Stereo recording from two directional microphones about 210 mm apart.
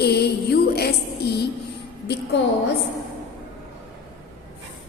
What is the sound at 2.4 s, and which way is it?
Speech, 60° left (ahead or behind).